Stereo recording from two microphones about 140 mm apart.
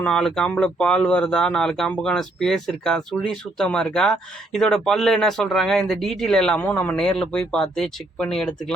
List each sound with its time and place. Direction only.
0.0 s speech: 5° left (ahead or behind)